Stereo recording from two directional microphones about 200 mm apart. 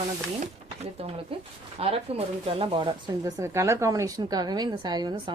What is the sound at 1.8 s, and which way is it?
Speech, 30° right (ahead or behind).